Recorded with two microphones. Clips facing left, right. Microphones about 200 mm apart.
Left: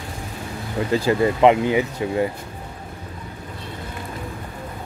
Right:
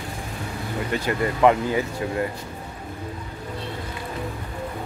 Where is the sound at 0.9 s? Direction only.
25° left (ahead or behind).